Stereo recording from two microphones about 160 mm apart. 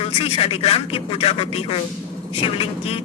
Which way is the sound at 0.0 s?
35° left (ahead or behind).